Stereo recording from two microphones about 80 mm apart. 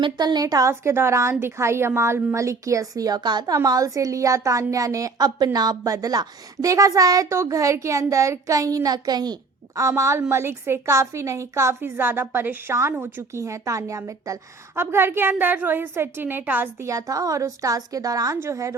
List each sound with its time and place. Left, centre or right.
0.0 s a woman's voice: right
3.2 s speech: right
9.7 s a woman's voice: right
14.8 s a woman's voice: right
16.8 s a woman's voice: right